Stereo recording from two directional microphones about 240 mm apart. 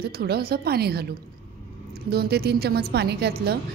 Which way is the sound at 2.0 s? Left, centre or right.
Right.